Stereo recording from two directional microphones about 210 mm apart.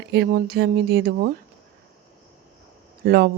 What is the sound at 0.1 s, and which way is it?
Speech, 50° right (ahead or behind).